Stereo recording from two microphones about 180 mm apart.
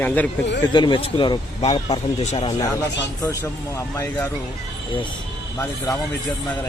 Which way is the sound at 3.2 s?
15° left (ahead or behind).